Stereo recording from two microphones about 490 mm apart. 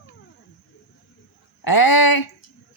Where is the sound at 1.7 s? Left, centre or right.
Left.